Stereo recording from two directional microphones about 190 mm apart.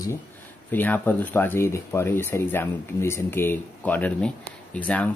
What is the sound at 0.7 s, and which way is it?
Speech, 10° left (ahead or behind).